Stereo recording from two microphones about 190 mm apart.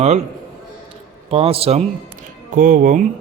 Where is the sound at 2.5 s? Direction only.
45° right (ahead or behind).